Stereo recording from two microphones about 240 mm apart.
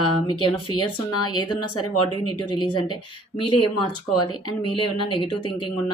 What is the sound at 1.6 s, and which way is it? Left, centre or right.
Speech, left.